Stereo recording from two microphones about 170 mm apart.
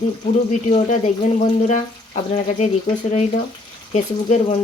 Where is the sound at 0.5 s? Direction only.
45° left (ahead or behind).